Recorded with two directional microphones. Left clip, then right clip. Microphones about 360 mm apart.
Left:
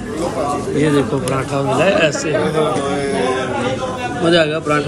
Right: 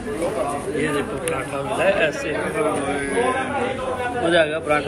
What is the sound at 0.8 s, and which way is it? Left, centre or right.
Speech, centre.